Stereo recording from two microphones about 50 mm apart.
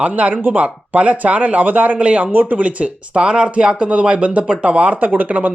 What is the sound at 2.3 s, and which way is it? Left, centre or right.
Speech, right.